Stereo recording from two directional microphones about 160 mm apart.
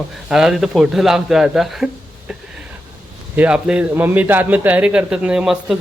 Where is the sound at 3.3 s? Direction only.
10° right (ahead or behind).